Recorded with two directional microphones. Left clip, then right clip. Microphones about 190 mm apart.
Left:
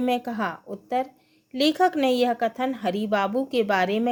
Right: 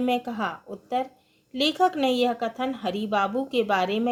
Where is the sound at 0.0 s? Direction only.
40° left (ahead or behind).